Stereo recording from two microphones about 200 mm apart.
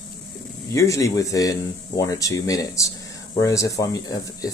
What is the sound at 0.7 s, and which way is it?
Speech, 15° left (ahead or behind).